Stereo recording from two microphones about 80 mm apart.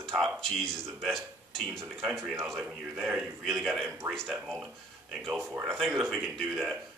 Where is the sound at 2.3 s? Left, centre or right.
Right.